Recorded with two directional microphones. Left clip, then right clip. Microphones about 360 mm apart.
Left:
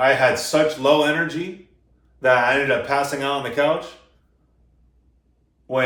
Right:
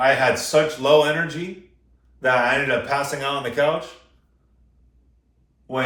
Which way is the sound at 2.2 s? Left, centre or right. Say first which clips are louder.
Left 2 dB; centre.